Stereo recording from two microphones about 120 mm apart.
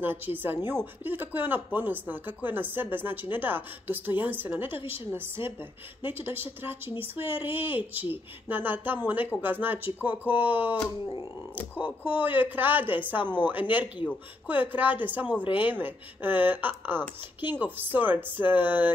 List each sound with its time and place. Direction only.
0.0 s speech: 15° right (ahead or behind)
12.0 s speech: 15° right (ahead or behind)